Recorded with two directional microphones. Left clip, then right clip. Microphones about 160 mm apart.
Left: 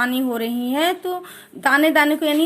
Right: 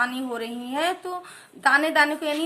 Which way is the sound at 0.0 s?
40° left (ahead or behind).